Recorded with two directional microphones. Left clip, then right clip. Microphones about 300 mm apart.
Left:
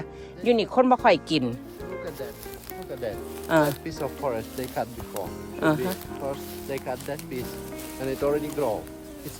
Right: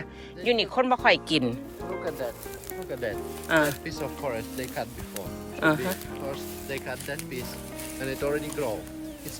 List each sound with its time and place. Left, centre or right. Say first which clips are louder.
0.4 s speech: left 3 dB; centre
3.0 s speech: left 1 dB; centre
6.7 s speech: left 3 dB; left